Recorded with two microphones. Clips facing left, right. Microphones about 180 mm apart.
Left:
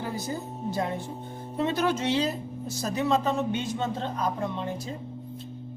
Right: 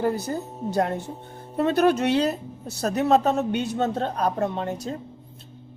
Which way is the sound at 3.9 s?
65° right (ahead or behind).